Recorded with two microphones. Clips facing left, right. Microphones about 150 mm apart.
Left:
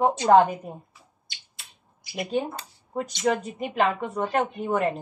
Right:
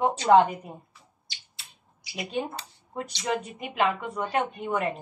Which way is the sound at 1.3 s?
50° left (ahead or behind).